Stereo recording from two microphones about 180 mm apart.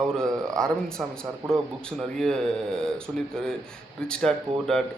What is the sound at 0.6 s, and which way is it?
A man's voice, 5° left (ahead or behind).